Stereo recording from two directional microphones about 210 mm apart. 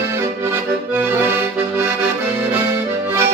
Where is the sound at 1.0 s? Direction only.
10° right (ahead or behind).